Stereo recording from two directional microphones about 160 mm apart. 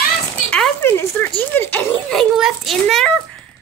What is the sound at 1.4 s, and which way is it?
Speech, 15° left (ahead or behind).